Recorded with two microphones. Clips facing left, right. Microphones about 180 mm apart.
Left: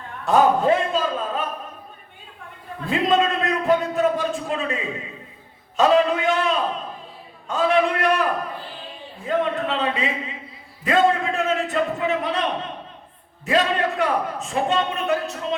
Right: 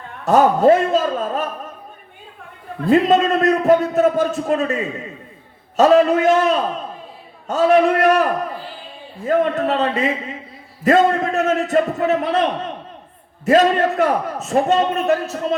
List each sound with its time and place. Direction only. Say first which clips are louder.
0.3 s a man's voice: right 5 dB; 45° right (ahead or behind)
2.8 s a man's voice: right 6 dB; 40° right (ahead or behind)
13.4 s a man's voice: right 7 dB; 45° right (ahead or behind)